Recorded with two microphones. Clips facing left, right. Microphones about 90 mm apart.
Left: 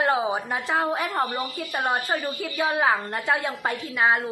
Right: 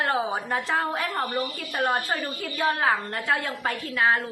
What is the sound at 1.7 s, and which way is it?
A woman's voice, centre (ahead or behind).